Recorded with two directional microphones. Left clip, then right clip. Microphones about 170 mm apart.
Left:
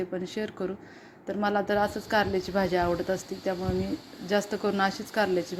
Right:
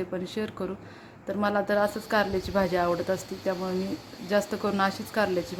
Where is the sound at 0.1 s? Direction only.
10° left (ahead or behind).